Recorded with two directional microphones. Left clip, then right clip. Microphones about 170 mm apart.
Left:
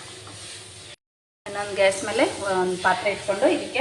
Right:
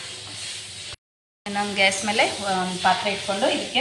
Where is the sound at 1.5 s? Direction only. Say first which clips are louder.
Even; 35° left (ahead or behind).